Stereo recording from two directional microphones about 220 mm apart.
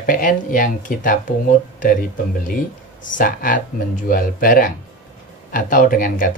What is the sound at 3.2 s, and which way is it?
Speech, 35° left (ahead or behind).